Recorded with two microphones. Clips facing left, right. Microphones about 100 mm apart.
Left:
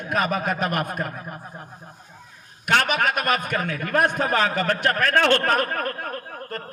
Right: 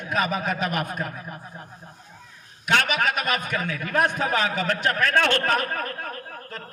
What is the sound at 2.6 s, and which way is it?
A man's voice, 50° left (ahead or behind).